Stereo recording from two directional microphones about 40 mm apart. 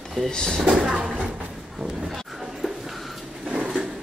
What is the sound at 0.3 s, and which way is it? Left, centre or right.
Speech, centre.